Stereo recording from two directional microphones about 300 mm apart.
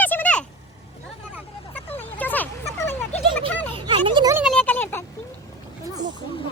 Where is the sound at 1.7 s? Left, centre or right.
Centre.